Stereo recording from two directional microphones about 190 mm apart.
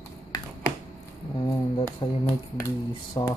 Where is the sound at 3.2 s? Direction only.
25° left (ahead or behind).